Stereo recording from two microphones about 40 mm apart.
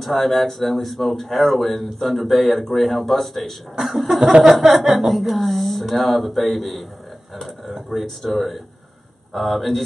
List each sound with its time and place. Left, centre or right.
0.0 s speech: centre
4.2 s a sound: right
4.5 s speech: centre